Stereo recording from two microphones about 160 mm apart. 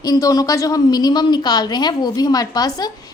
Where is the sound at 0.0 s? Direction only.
20° left (ahead or behind).